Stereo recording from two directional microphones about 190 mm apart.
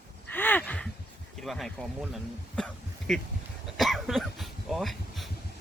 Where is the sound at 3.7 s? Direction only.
Centre (ahead or behind).